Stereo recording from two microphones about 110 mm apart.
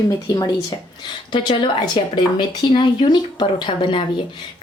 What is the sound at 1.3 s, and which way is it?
A woman's voice, 45° left (ahead or behind).